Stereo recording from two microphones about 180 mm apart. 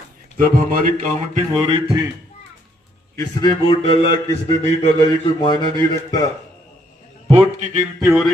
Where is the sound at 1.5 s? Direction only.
30° right (ahead or behind).